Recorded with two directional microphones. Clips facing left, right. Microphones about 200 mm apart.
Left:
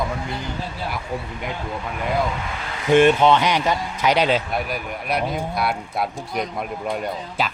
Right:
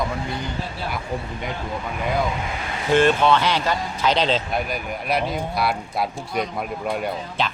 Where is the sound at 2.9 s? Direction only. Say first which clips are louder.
Left 3 dB; 20° left (ahead or behind).